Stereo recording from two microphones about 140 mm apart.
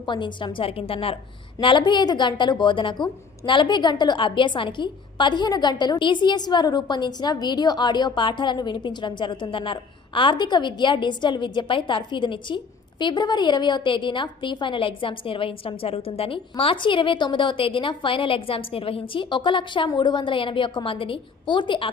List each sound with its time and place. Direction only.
0.0 s a woman's voice: 35° left (ahead or behind)